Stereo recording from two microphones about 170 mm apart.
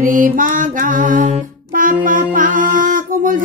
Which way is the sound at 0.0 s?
50° right (ahead or behind).